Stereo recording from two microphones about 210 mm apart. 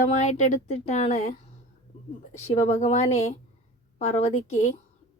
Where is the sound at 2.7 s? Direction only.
30° left (ahead or behind).